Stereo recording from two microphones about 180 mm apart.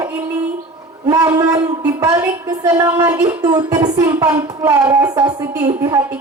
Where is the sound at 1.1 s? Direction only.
20° right (ahead or behind).